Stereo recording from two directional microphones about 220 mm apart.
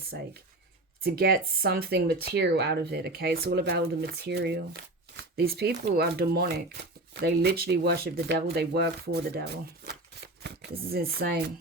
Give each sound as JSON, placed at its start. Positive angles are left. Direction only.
{"t": 1.0, "sound": "speech", "side_deg": -45}